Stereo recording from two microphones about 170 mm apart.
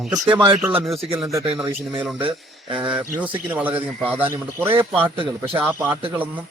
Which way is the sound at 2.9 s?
10° right (ahead or behind).